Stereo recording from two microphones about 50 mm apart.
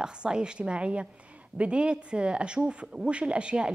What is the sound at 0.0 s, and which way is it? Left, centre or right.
A woman's voice, centre.